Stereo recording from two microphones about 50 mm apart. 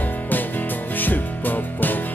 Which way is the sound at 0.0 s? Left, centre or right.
Left.